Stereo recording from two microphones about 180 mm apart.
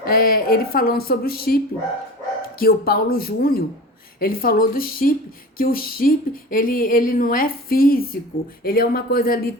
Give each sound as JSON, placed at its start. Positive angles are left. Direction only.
{"t": 0.0, "sound": "speech", "side_deg": 55}